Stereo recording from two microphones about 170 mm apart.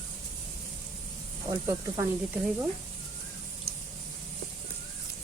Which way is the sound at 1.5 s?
20° right (ahead or behind).